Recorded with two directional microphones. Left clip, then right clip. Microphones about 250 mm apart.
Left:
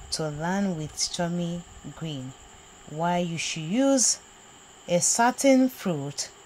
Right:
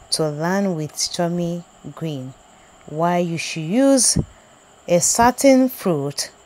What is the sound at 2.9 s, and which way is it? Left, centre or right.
Speech, right.